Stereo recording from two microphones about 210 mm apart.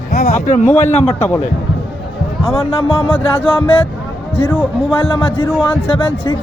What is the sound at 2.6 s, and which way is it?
Speech, 25° left (ahead or behind).